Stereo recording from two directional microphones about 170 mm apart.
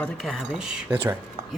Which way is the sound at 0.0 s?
Centre (ahead or behind).